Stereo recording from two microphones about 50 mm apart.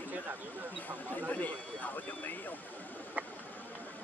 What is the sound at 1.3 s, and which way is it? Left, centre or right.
A man's voice, left.